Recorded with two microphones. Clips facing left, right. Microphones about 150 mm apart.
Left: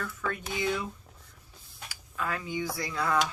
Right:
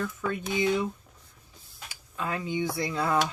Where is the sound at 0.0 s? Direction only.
20° right (ahead or behind).